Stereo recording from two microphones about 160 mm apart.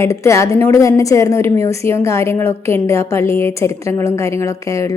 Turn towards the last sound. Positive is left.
turn(degrees=20)  # may be behind; listen again after turning